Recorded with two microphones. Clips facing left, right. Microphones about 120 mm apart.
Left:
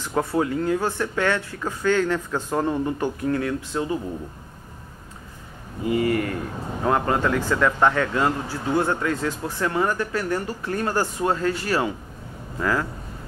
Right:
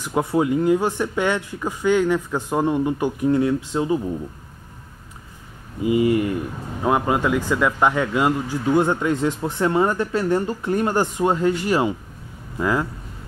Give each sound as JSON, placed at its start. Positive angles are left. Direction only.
{"t": 0.0, "sound": "speech", "side_deg": -15}
{"t": 5.8, "sound": "speech", "side_deg": -20}